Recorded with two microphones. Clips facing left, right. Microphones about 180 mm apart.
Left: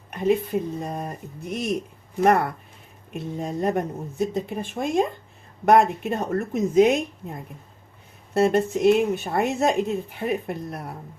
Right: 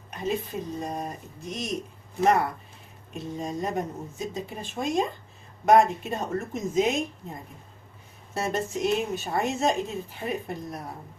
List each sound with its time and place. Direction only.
0.1 s a sound: 60° left (ahead or behind)
0.9 s speech: 60° left (ahead or behind)
8.3 s speech: 60° left (ahead or behind)